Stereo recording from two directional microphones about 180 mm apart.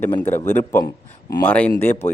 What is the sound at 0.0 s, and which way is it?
Speech, 10° left (ahead or behind).